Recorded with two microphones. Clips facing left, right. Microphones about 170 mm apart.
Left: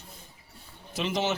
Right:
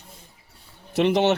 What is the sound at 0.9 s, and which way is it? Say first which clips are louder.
Speech: right 9 dB; 65° right (ahead or behind).